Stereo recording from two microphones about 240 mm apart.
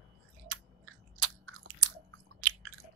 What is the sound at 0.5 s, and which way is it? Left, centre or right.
Chewing, right.